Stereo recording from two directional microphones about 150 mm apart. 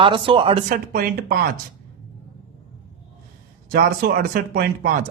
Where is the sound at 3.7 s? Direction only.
85° right.